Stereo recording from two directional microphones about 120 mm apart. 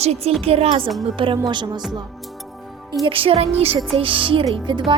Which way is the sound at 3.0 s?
50° right (ahead or behind).